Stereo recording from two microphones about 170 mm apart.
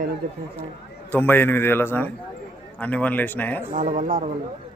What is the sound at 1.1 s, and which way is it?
A man's voice, 10° left (ahead or behind).